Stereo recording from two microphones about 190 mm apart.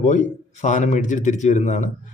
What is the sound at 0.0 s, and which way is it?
A man's voice, 40° left (ahead or behind).